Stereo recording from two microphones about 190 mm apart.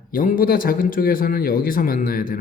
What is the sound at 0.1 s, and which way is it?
A man's voice, 45° left (ahead or behind).